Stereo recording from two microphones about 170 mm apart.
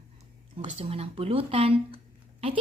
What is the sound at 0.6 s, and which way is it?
Speech, 40° right (ahead or behind).